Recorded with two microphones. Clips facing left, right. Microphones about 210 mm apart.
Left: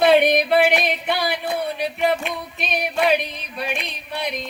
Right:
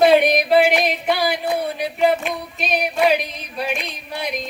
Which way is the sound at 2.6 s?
60° left (ahead or behind).